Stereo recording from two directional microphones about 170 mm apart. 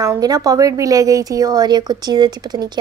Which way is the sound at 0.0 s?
20° right (ahead or behind).